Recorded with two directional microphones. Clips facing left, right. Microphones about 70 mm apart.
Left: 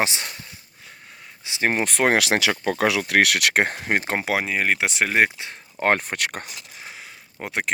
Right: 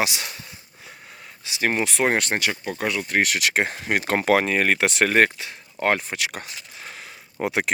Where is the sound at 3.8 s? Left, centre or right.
Left.